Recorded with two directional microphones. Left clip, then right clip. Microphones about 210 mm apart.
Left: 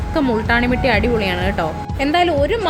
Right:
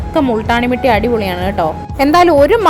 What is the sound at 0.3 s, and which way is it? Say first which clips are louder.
A woman's voice: right 3 dB; 10° right (ahead or behind).